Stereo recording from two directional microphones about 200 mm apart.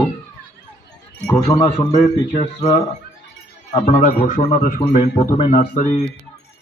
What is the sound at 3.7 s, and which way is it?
A man's voice, 35° left (ahead or behind).